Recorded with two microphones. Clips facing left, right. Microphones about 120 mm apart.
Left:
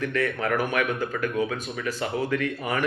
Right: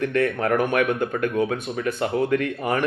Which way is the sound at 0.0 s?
50° right (ahead or behind).